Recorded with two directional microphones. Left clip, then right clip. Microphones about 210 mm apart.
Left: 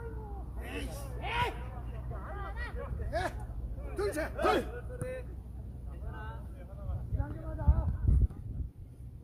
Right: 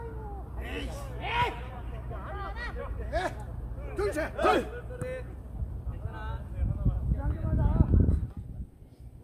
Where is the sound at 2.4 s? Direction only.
10° right (ahead or behind).